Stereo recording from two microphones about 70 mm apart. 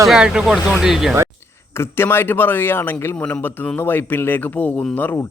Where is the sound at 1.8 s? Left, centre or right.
Left.